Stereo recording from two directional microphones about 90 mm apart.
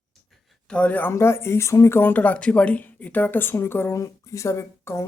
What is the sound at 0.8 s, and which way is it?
Speech, 20° left (ahead or behind).